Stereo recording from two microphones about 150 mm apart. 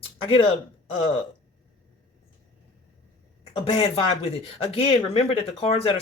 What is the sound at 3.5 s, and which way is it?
Speech, 40° left (ahead or behind).